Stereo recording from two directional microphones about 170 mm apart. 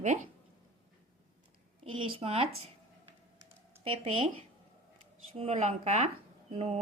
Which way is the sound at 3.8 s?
30° right (ahead or behind).